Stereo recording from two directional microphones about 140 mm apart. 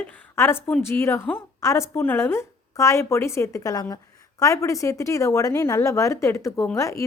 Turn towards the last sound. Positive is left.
turn(degrees=20)  # may be behind; listen again after turning